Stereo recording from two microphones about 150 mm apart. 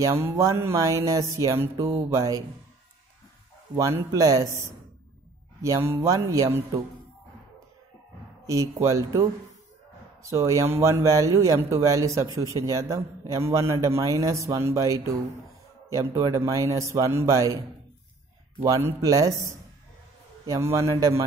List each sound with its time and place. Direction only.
0.0 s speech: 20° right (ahead or behind)
3.7 s speech: 20° right (ahead or behind)
8.5 s speech: 20° right (ahead or behind)
10.3 s speech: 20° right (ahead or behind)
18.7 s speech: 20° right (ahead or behind)